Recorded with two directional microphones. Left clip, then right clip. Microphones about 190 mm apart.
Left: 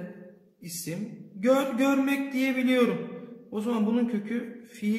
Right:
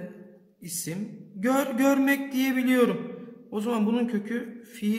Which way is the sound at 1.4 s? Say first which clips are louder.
Even; 35° right (ahead or behind).